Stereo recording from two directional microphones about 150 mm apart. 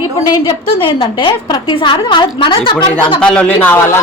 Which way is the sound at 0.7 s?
35° left (ahead or behind).